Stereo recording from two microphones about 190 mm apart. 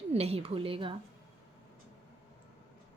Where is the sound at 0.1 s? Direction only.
30° right (ahead or behind).